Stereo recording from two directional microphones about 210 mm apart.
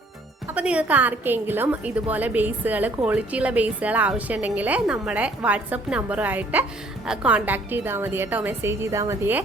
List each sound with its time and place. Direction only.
0.5 s a woman's voice: 5° right (ahead or behind)